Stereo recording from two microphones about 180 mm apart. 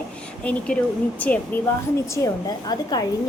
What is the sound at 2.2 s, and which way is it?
Speech, 20° left (ahead or behind).